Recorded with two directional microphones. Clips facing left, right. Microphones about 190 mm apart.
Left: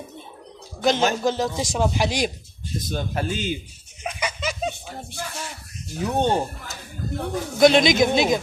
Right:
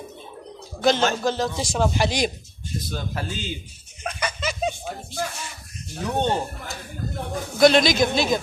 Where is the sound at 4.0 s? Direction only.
10° left (ahead or behind).